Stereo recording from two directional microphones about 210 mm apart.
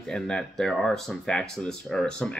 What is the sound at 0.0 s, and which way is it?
Speech, 5° left (ahead or behind).